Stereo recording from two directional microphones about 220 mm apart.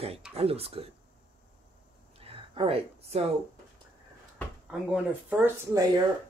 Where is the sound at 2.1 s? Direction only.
25° right (ahead or behind).